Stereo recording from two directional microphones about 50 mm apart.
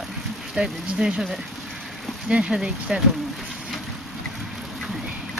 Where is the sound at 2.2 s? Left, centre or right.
Centre.